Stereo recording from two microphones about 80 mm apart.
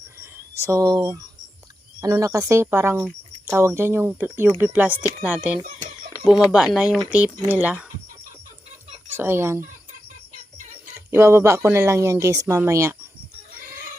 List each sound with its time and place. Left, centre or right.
0.2 s a sound: right
2.0 s speech: right; by 5.5 s centre
6.2 s speech: centre
7.1 s speech: right
9.1 s speech: right
11.1 s speech: right
12.3 s speech: right